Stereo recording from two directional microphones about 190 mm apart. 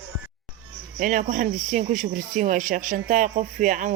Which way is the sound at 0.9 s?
45° right (ahead or behind).